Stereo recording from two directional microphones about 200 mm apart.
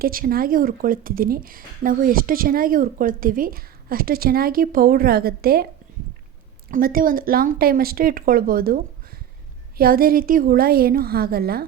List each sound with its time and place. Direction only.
0.0 s a woman's voice: 45° right (ahead or behind)
6.7 s a woman's voice: 45° right (ahead or behind)